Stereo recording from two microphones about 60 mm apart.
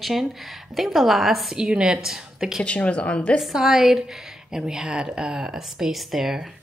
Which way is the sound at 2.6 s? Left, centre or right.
Left.